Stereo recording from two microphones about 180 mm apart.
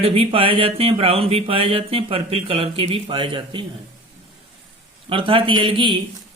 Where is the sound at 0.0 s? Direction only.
30° right (ahead or behind).